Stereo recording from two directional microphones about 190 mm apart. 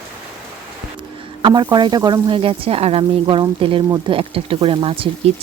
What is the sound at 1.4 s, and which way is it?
Speech, 25° right (ahead or behind).